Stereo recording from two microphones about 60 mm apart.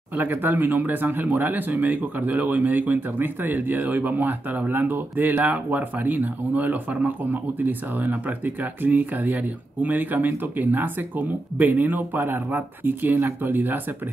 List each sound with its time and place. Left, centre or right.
0.1 s speech: right